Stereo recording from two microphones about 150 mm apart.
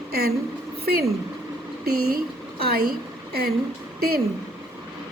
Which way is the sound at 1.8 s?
90° right.